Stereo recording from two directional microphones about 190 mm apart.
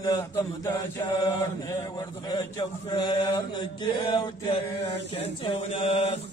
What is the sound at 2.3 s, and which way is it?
Speech, 20° left (ahead or behind).